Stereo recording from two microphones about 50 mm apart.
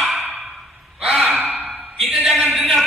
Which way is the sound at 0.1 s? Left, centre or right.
Centre.